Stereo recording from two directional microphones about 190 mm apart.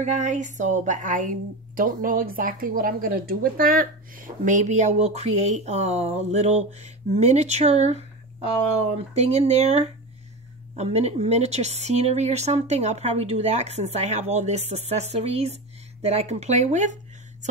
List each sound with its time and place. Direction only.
0.0 s speech: 40° right (ahead or behind)